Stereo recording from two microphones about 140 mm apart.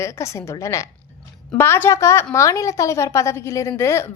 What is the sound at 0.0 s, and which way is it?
A woman's voice, 20° left (ahead or behind).